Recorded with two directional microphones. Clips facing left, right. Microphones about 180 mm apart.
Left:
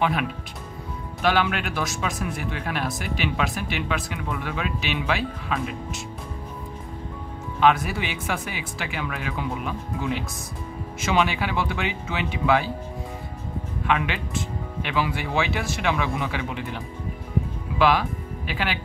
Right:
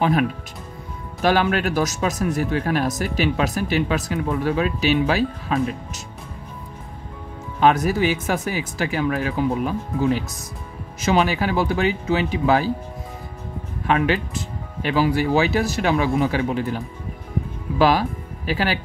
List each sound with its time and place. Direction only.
0.0 s speech: 45° right (ahead or behind)
7.6 s speech: 40° right (ahead or behind)
13.8 s speech: 40° right (ahead or behind)